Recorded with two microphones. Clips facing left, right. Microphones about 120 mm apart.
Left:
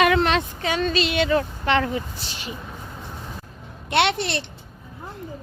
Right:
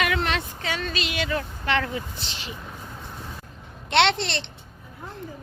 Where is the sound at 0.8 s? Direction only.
30° left (ahead or behind).